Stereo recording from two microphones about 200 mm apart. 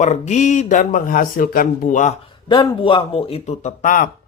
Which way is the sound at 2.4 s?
25° left (ahead or behind).